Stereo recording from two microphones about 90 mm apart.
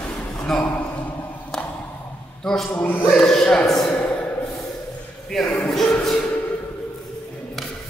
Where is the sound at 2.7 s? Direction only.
20° left (ahead or behind).